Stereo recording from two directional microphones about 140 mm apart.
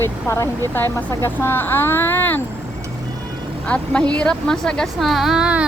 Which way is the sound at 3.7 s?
10° left (ahead or behind).